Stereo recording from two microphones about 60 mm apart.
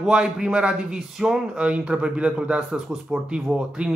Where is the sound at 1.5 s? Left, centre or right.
Right.